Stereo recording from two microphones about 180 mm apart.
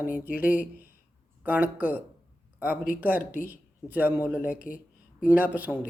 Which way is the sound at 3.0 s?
10° right (ahead or behind).